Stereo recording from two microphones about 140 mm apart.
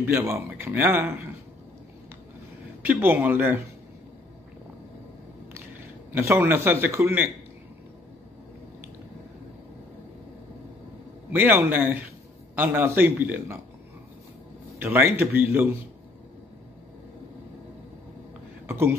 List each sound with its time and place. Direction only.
0.0 s a man's voice: 20° right (ahead or behind)
2.9 s a man's voice: 15° right (ahead or behind)
6.1 s a man's voice: 15° right (ahead or behind)
11.3 s a man's voice: 15° right (ahead or behind)
14.8 s a man's voice: 15° right (ahead or behind)
18.7 s speech: 15° right (ahead or behind)